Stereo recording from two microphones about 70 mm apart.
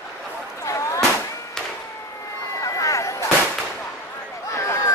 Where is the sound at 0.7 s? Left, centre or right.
Left.